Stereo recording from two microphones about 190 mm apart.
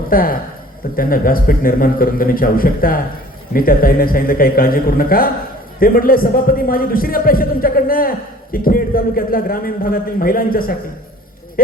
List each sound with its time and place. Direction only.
0.1 s a man's voice: 50° left (ahead or behind)